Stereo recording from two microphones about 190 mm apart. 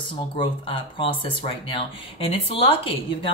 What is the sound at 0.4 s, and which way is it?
Speech, 25° left (ahead or behind).